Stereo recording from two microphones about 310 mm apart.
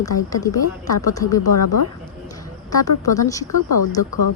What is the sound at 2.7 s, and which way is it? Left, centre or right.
Speech, centre.